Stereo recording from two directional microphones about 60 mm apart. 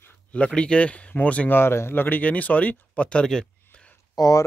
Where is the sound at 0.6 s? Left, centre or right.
Centre.